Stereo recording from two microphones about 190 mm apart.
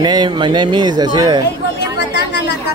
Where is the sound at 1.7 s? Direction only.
65° left (ahead or behind).